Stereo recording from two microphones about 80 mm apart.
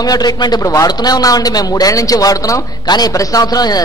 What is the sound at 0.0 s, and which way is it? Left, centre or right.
A man's voice, left.